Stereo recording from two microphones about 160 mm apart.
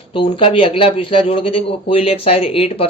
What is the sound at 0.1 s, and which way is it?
Speech, 30° left (ahead or behind).